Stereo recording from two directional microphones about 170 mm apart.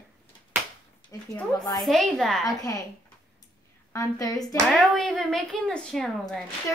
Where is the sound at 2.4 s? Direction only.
20° left (ahead or behind).